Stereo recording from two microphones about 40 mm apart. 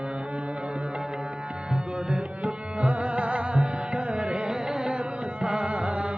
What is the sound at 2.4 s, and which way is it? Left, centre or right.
Music, right.